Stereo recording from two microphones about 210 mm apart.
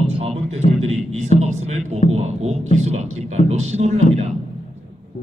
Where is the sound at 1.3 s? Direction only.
30° right (ahead or behind).